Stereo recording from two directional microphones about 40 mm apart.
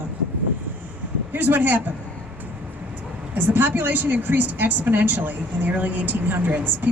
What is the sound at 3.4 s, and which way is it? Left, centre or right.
A woman's voice, right.